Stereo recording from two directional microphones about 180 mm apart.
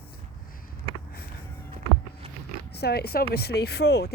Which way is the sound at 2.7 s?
65° left (ahead or behind).